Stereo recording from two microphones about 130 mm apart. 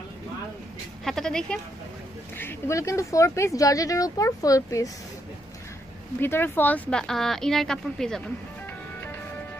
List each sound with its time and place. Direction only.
1.0 s a sound: 5° left (ahead or behind)
2.3 s speech: 20° left (ahead or behind)
6.1 s speech: 15° left (ahead or behind)